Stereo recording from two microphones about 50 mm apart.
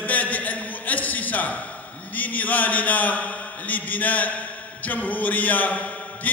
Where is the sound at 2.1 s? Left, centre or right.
Left.